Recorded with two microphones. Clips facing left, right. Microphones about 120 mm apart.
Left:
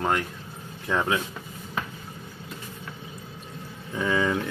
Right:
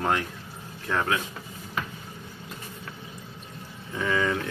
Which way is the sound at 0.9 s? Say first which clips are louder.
Left 1 dB; 15° left (ahead or behind).